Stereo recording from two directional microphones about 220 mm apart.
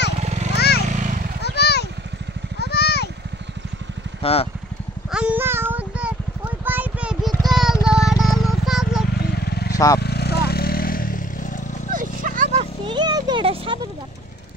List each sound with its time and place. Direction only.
0.2 s vehicle: 30° right (ahead or behind)
0.6 s vehicle: 45° left (ahead or behind)
0.8 s vehicle: 35° right (ahead or behind)
1.4 s a sound: 50° left (ahead or behind)
2.6 s vehicle: 45° left (ahead or behind)
4.2 s speech: 25° left (ahead or behind)
5.1 s a sound: 5° right (ahead or behind)
9.4 s vehicle: 45° left (ahead or behind)
11.9 s a sound: 40° right (ahead or behind)
12.8 s music: 20° right (ahead or behind)